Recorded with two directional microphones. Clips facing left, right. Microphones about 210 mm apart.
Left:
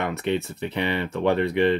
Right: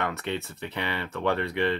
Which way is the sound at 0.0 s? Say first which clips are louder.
Left 5 dB; 15° left (ahead or behind).